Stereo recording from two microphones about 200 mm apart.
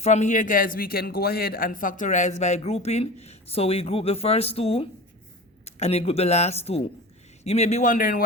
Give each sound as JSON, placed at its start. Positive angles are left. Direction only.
{"t": 0.0, "sound": "a man's voice", "side_deg": 35}